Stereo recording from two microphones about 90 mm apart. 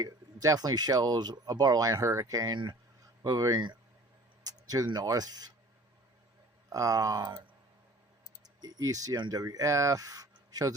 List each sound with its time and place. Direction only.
0.0 s speech: 45° right (ahead or behind)
6.7 s speech: 40° right (ahead or behind)
8.6 s speech: 40° right (ahead or behind)